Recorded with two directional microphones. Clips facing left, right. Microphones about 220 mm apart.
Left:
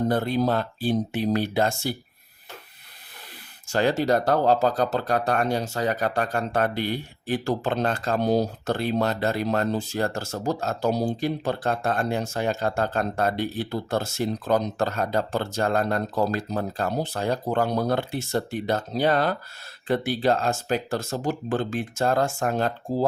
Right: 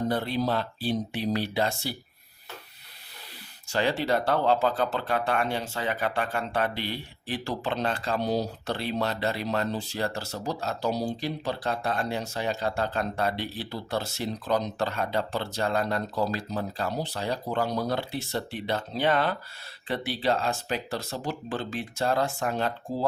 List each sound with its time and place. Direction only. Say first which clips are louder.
0.1 s speech: left 4 dB; 45° left (ahead or behind)
3.7 s speech: left 4 dB; 45° left (ahead or behind)